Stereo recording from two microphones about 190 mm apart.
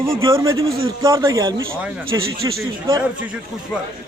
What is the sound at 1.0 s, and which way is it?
Speech, 15° right (ahead or behind).